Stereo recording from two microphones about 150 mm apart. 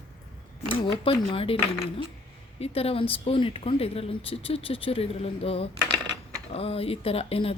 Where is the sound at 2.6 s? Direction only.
40° left (ahead or behind).